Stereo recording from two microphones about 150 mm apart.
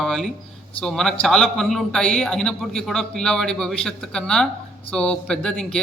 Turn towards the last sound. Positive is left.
turn(degrees=5)  # may be behind; listen again after turning